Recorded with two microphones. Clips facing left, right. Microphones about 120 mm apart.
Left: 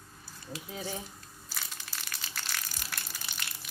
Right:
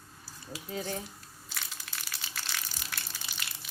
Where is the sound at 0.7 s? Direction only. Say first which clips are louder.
Right 3 dB; 5° left (ahead or behind).